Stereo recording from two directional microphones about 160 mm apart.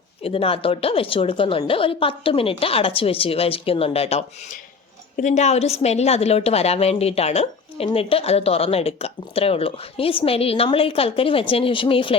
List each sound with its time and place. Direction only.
0.2 s a woman's voice: 35° left (ahead or behind)